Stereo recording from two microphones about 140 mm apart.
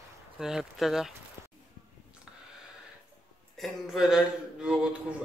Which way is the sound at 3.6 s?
Centre (ahead or behind).